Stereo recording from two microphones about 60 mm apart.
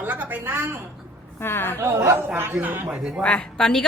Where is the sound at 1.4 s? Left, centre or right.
Left.